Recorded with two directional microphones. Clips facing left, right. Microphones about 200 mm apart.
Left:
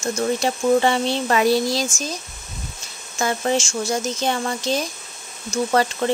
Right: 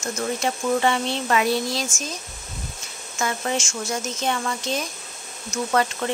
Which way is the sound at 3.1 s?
35° left (ahead or behind).